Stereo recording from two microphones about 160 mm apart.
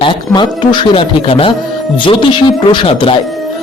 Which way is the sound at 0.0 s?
30° left (ahead or behind).